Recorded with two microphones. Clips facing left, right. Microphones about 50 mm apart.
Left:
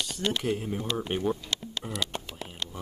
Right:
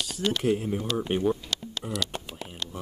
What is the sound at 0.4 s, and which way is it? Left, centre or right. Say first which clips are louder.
Speech: right 4 dB; centre.